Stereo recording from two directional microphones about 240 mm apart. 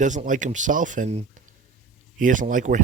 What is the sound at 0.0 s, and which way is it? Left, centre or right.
Speech, right.